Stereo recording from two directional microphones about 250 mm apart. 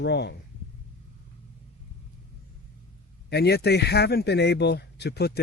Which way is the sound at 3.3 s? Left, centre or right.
Left.